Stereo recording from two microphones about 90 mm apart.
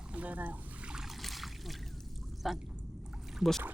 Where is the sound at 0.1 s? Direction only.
15° right (ahead or behind).